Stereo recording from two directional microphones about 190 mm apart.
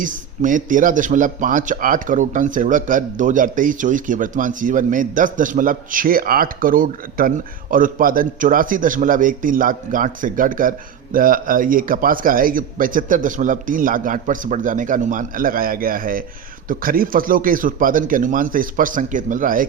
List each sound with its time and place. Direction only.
0.0 s a man's voice: 45° right (ahead or behind)